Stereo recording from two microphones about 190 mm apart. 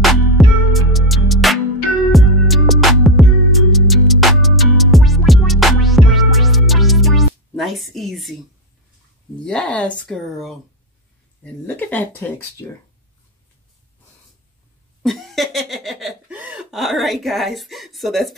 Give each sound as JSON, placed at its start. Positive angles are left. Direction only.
{"t": 0.0, "sound": "music", "side_deg": 0}
{"t": 9.4, "sound": "speech", "side_deg": 5}
{"t": 11.6, "sound": "speech", "side_deg": 10}
{"t": 15.0, "sound": "laughter", "side_deg": 0}